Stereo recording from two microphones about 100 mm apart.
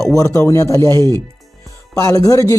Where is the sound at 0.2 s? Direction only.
30° left (ahead or behind).